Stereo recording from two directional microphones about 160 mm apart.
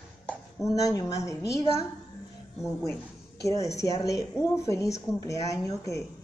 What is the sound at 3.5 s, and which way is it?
Speech, 20° left (ahead or behind).